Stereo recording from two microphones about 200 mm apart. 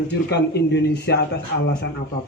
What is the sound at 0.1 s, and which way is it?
A man's voice, 55° left (ahead or behind).